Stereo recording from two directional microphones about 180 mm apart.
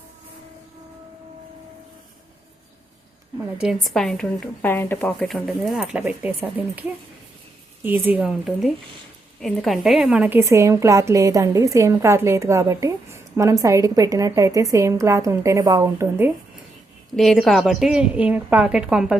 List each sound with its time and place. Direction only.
3.3 s a woman's voice: 5° right (ahead or behind)
7.9 s a woman's voice: 10° right (ahead or behind)
17.2 s a woman's voice: centre (ahead or behind)